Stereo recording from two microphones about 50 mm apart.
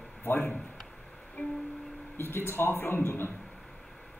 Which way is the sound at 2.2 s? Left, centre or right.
Left.